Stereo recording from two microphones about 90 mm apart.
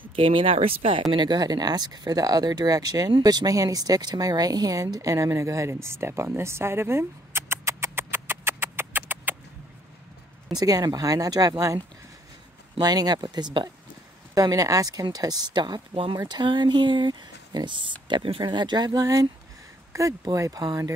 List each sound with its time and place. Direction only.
0.0 s speech: 80° right
1.1 s speech: 55° right (ahead or behind); by 9.4 s 20° right (ahead or behind)
10.6 s speech: 45° right (ahead or behind)
14.3 s speech: 40° right (ahead or behind)
15.9 s speech: 80° right
16.2 s speech: 55° right (ahead or behind)